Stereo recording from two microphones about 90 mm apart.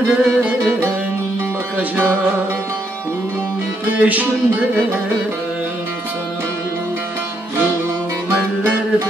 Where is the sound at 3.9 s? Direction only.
20° right (ahead or behind).